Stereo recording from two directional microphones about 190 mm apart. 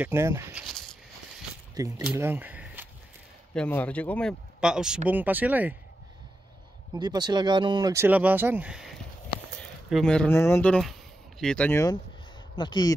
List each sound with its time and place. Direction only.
0.0 s speech: 15° right (ahead or behind)
1.8 s speech: 15° right (ahead or behind)
2.1 s a sound: 10° right (ahead or behind)
3.5 s speech: 5° left (ahead or behind); by 5.8 s 10° right (ahead or behind)
6.9 s speech: 20° right (ahead or behind); by 12.9 s 25° left (ahead or behind)